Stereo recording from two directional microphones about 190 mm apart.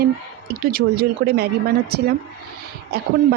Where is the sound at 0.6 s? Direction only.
50° right (ahead or behind).